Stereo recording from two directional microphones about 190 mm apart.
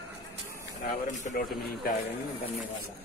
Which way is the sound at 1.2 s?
55° left (ahead or behind).